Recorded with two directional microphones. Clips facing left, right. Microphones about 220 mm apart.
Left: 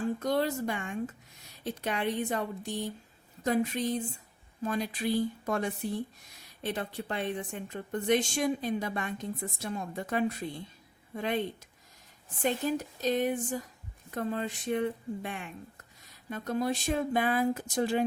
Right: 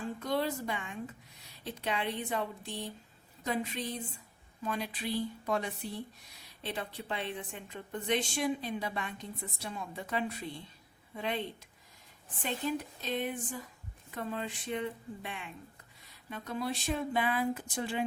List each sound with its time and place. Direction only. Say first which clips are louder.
0.0 s a woman's voice: left 4 dB; 45° left (ahead or behind)